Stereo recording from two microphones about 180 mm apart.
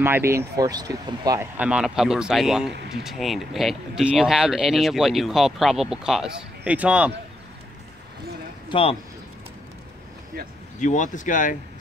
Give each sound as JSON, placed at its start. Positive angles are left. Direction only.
{"t": 0.0, "sound": "speech", "side_deg": -15}
{"t": 1.6, "sound": "speech", "side_deg": -5}
{"t": 8.6, "sound": "speech", "side_deg": 30}
{"t": 10.8, "sound": "speech", "side_deg": 45}